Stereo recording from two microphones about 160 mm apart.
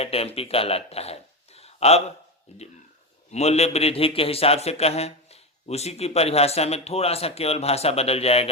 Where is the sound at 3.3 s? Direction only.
40° left (ahead or behind).